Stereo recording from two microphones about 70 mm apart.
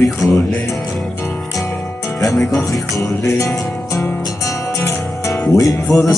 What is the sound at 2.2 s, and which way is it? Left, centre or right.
Music, left.